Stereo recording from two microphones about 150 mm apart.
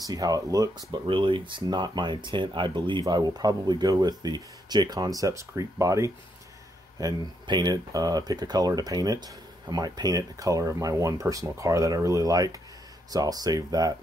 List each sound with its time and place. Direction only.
0.0 s speech: 25° right (ahead or behind)